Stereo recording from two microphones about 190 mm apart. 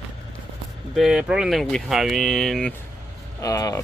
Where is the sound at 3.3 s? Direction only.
20° left (ahead or behind).